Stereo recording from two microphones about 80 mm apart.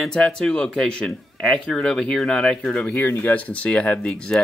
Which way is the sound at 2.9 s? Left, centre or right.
Left.